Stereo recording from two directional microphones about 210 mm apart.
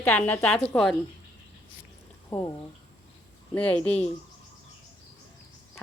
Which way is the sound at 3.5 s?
5° left (ahead or behind).